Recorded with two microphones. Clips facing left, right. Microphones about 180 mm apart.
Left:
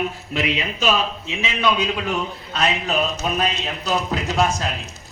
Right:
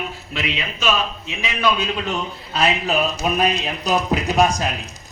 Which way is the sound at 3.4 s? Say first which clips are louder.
Right 3 dB; 15° right (ahead or behind).